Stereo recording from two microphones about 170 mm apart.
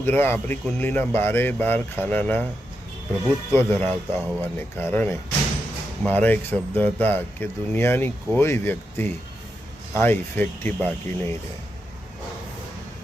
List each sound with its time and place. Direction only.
0.0 s speech: 10° left (ahead or behind)
3.5 s speech: 15° left (ahead or behind)